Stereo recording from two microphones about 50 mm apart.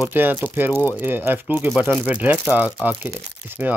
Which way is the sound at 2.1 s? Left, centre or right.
Right.